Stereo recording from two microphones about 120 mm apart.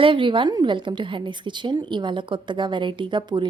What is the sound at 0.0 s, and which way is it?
A woman's voice, 45° right (ahead or behind).